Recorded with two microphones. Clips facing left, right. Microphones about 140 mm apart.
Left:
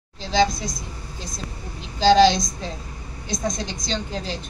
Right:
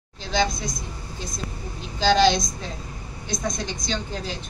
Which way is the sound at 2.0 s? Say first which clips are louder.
Left 4 dB; 35° left (ahead or behind).